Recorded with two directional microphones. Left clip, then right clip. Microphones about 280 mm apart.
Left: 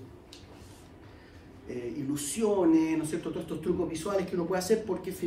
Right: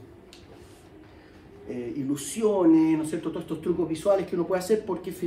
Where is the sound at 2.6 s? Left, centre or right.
Right.